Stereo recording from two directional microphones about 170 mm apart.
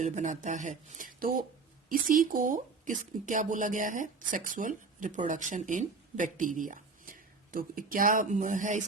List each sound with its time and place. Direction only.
0.0 s speech: 45° right (ahead or behind)